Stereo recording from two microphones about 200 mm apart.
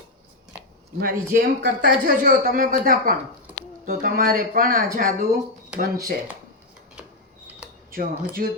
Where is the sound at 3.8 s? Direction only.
45° right (ahead or behind).